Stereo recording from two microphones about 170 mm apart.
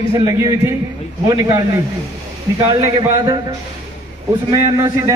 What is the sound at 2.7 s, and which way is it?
Speech, 25° right (ahead or behind).